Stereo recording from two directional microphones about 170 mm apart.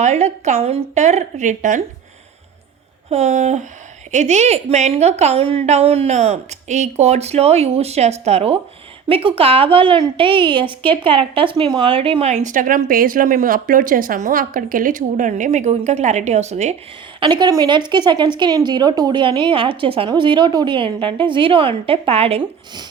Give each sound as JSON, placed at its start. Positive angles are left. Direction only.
{"t": 0.0, "sound": "a woman's voice", "side_deg": -40}
{"t": 3.1, "sound": "a woman's voice", "side_deg": -40}
{"t": 17.2, "sound": "speech", "side_deg": -30}